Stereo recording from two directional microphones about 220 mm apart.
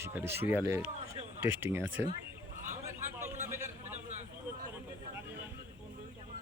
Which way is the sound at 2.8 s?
10° right (ahead or behind).